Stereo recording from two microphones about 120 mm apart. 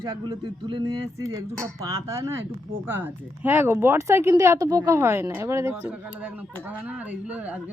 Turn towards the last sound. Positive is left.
turn(degrees=-15)  # may be behind; listen again after turning